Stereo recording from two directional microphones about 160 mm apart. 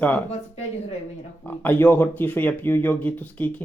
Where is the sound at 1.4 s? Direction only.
10° left (ahead or behind).